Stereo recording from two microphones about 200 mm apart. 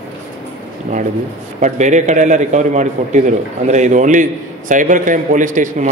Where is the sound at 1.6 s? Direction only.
35° right (ahead or behind).